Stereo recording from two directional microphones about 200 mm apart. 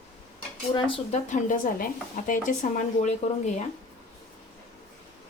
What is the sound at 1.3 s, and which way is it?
Speech, 40° left (ahead or behind).